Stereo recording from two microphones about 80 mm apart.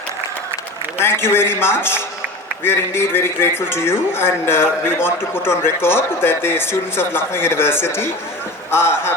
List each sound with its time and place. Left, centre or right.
0.9 s a man's voice: left